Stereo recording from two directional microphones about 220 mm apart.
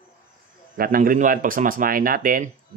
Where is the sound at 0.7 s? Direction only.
40° right (ahead or behind).